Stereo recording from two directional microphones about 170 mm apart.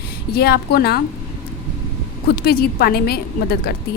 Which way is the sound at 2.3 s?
70° left (ahead or behind).